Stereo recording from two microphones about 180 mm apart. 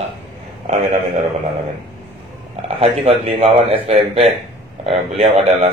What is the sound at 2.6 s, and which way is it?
Speech, 35° right (ahead or behind).